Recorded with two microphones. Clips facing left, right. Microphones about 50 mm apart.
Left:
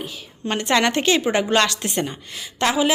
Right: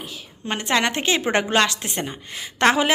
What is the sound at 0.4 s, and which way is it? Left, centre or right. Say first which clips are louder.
A woman's voice: left 2 dB; centre.